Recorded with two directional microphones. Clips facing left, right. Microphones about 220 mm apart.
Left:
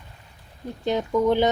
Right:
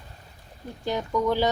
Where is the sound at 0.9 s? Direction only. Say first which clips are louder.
Left 4 dB; 20° left (ahead or behind).